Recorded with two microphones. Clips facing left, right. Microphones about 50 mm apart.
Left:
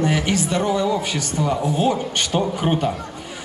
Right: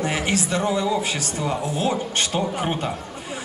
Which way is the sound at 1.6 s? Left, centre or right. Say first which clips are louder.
Left 4 dB; left.